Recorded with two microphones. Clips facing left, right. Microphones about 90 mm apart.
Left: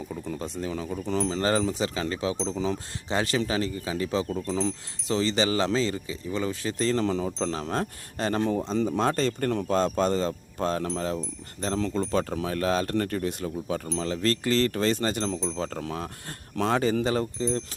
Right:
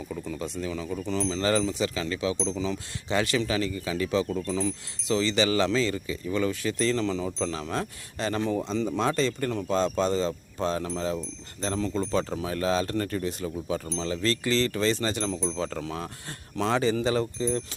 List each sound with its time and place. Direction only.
0.3 s speech: 40° left (ahead or behind)
3.1 s speech: 35° left (ahead or behind)